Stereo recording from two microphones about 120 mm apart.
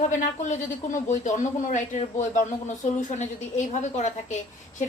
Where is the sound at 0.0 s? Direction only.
90° left.